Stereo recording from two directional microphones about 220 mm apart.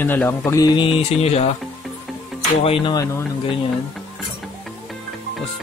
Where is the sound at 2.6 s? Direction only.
25° left (ahead or behind).